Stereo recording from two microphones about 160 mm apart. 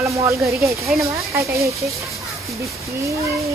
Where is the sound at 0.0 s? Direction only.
20° right (ahead or behind).